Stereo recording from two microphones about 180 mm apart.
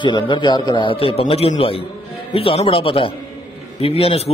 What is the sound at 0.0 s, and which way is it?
A man's voice, 25° left (ahead or behind).